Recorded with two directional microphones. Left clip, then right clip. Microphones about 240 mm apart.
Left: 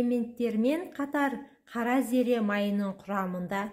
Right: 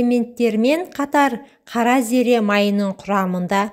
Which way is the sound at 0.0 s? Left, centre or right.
Right.